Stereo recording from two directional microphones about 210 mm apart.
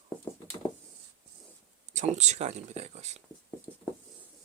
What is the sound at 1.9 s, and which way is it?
Speech, 35° right (ahead or behind).